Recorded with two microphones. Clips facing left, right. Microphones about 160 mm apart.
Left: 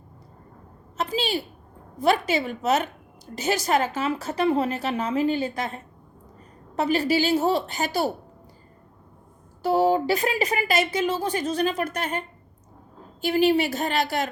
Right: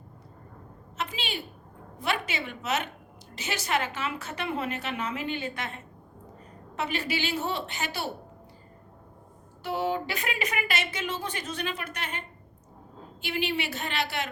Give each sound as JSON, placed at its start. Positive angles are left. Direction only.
{"t": 0.9, "sound": "a sound", "side_deg": 35}
{"t": 2.0, "sound": "speech", "side_deg": 40}
{"t": 9.6, "sound": "speech", "side_deg": 40}
{"t": 13.2, "sound": "speech", "side_deg": 40}